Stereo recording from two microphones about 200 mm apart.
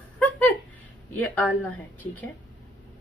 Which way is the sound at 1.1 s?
10° left (ahead or behind).